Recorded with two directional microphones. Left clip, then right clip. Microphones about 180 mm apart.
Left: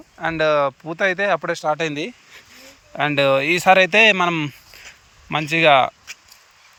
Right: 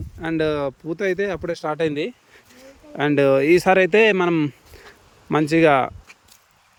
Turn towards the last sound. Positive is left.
turn(degrees=-20)  # may be behind; listen again after turning